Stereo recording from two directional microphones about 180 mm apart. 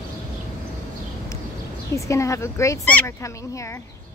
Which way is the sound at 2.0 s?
15° left (ahead or behind).